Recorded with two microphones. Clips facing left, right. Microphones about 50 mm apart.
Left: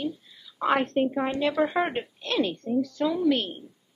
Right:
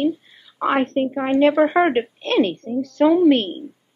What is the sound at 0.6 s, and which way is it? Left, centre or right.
Speech, right.